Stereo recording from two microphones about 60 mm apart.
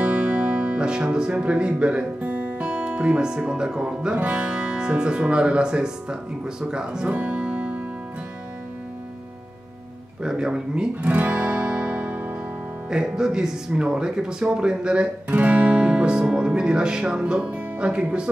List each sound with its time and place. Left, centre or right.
0.0 s speech: right
7.1 s music: right
10.2 s speech: centre
11.1 s music: right
12.9 s speech: centre
15.2 s guitar: right